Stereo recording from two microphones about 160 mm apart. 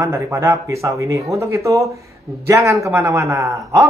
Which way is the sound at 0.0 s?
20° right (ahead or behind).